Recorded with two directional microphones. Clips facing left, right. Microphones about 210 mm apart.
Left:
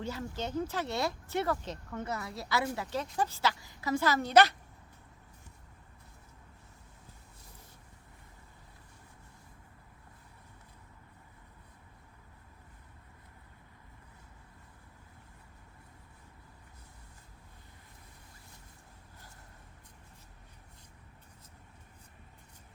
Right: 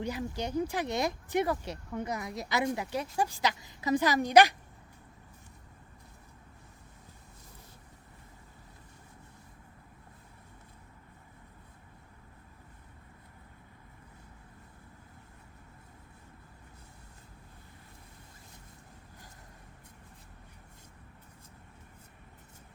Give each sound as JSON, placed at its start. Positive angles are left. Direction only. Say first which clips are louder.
{"t": 0.0, "sound": "speech", "louder": "right 3 dB", "side_deg": -15}